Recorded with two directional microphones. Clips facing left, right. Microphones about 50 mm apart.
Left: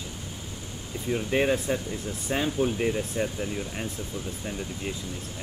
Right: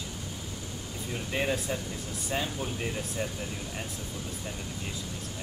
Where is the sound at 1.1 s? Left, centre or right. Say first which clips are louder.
Left 6 dB; left.